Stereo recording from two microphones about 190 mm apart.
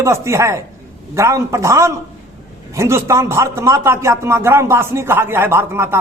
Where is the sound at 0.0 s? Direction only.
15° right (ahead or behind).